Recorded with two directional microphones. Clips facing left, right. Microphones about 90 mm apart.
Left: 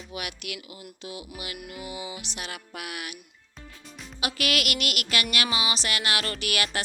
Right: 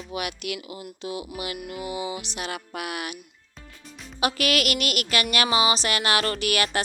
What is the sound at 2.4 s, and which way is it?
Speech, 40° right (ahead or behind).